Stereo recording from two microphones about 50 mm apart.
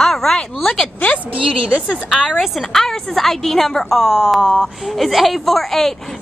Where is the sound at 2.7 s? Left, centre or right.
Centre.